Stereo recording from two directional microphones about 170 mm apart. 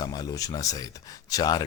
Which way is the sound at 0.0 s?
20° left (ahead or behind).